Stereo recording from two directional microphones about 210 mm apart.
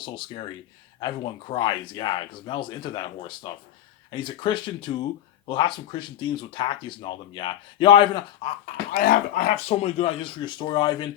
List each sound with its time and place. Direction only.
0.0 s speech: 20° left (ahead or behind)
8.9 s speech: 45° left (ahead or behind)
9.6 s speech: 30° left (ahead or behind)